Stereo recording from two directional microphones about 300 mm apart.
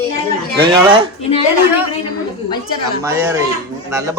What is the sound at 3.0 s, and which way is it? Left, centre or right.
Speech, centre.